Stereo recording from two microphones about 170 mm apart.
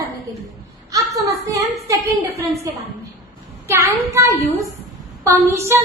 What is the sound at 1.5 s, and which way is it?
A woman's voice, 20° right (ahead or behind).